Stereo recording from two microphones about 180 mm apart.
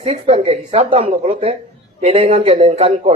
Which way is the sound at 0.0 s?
35° right (ahead or behind).